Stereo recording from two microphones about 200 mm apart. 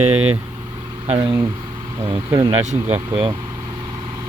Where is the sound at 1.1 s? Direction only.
25° right (ahead or behind).